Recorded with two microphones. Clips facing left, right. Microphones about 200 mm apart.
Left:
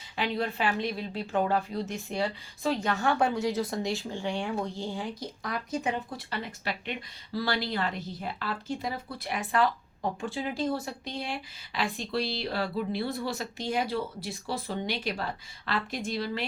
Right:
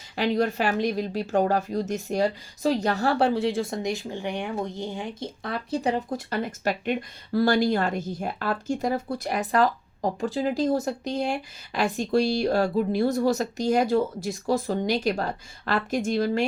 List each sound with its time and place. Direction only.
0.2 s a woman's voice: 40° right (ahead or behind)